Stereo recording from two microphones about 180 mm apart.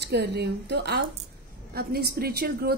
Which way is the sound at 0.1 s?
65° right (ahead or behind).